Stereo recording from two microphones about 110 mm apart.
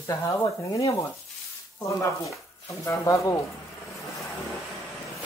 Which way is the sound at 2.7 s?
30° left (ahead or behind).